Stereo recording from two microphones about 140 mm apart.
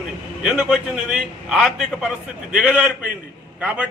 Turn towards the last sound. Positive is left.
turn(degrees=-10)  # may be behind; listen again after turning